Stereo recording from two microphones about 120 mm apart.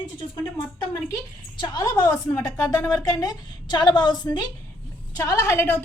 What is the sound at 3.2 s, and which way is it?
A woman's voice, 35° left (ahead or behind).